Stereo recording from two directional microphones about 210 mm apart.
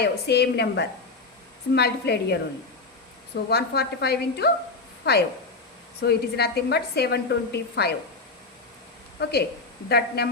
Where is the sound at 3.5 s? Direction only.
50° left (ahead or behind).